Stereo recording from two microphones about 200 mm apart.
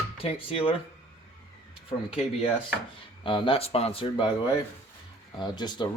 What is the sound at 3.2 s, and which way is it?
Speech, 25° left (ahead or behind).